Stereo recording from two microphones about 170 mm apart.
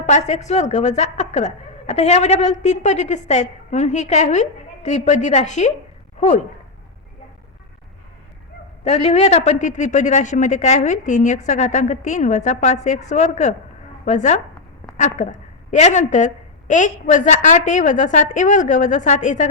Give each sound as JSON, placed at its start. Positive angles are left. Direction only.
{"t": 0.0, "sound": "speech", "side_deg": 40}
{"t": 8.8, "sound": "speech", "side_deg": 40}